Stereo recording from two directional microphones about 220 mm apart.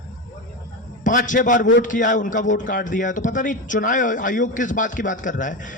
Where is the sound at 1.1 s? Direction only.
35° left (ahead or behind).